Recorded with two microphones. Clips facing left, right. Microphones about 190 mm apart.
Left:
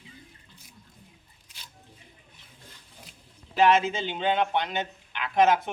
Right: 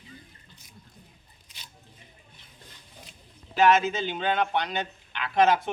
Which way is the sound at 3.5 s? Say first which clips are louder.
Even; 30° left (ahead or behind).